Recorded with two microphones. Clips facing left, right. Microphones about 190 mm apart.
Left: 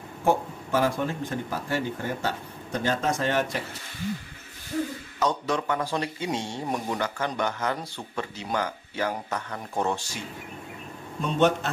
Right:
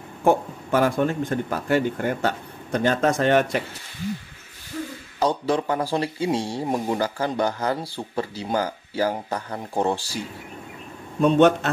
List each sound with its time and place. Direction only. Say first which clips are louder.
0.2 s a man's voice: right 4 dB; 60° right (ahead or behind)
5.2 s speech: right 4 dB; 30° right (ahead or behind)
11.3 s speech: right 4 dB; 65° right (ahead or behind)